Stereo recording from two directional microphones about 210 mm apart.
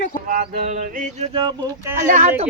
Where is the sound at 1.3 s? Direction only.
20° right (ahead or behind).